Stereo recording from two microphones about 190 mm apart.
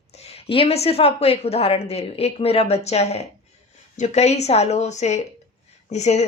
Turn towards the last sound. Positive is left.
turn(degrees=35)  # may be behind; listen again after turning